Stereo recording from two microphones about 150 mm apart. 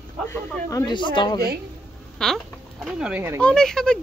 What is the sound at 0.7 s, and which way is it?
Speech, 25° left (ahead or behind).